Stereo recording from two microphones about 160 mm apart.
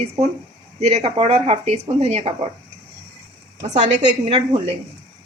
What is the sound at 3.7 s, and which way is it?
A woman's voice, 45° right (ahead or behind).